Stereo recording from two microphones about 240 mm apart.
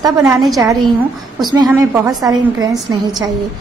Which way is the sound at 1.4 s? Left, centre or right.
Centre.